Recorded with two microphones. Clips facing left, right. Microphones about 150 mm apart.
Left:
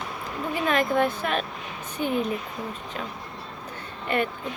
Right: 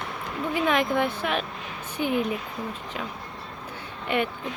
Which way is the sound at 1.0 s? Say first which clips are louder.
Left 1 dB; 15° right (ahead or behind).